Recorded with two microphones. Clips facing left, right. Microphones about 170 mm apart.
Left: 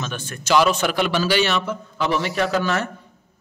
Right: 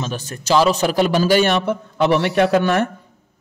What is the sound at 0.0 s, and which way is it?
A man's voice, 35° right (ahead or behind).